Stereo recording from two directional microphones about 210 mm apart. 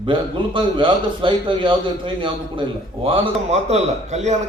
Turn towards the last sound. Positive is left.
turn(degrees=-30)  # may be behind; listen again after turning